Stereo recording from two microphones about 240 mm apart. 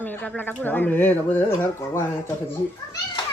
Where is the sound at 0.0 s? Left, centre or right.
Centre.